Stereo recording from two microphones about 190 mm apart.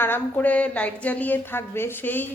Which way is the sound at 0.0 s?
10° left (ahead or behind).